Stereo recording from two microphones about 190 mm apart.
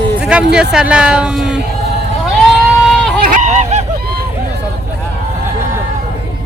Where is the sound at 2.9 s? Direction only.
Centre (ahead or behind).